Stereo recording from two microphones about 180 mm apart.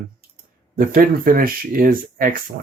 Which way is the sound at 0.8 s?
50° right (ahead or behind).